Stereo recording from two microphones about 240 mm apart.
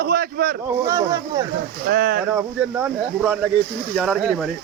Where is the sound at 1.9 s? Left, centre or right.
Right.